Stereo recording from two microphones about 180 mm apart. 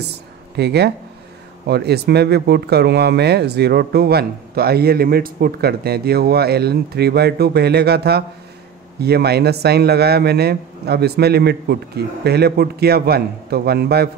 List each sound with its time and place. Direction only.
0.0 s speech: 65° right (ahead or behind)